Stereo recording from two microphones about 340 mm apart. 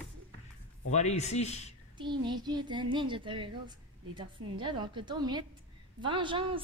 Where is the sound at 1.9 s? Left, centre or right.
Centre.